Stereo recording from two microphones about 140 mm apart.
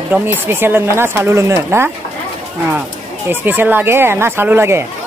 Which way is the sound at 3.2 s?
15° right (ahead or behind).